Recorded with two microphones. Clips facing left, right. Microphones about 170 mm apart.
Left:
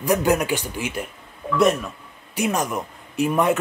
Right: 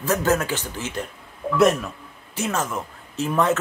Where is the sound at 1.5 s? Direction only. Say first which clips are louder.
Right 1 dB; centre (ahead or behind).